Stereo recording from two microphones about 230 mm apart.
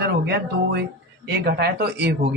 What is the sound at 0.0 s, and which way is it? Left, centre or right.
Speech, right.